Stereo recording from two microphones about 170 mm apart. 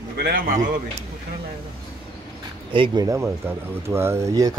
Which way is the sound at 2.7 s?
30° right (ahead or behind).